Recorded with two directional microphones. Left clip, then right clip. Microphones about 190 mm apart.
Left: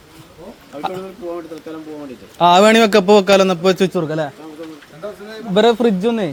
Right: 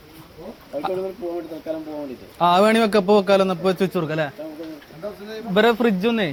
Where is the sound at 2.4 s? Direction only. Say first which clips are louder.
Left 6 dB; 50° left (ahead or behind).